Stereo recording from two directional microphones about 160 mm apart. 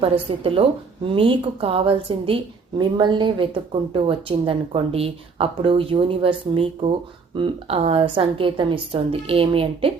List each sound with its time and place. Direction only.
0.0 s a woman's voice: 35° right (ahead or behind)